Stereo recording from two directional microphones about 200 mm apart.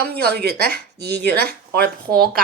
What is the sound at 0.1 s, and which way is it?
Speech, 50° right (ahead or behind).